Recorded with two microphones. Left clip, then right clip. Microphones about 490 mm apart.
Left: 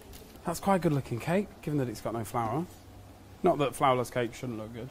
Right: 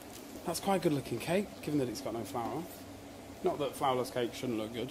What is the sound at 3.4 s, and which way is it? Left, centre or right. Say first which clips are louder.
Speech: left 7 dB; left.